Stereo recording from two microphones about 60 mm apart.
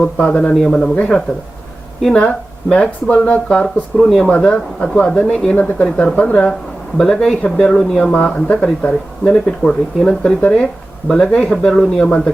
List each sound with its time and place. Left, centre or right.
0.0 s speech: centre